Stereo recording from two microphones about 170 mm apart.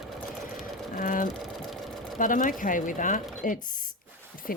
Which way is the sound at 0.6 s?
55° left (ahead or behind).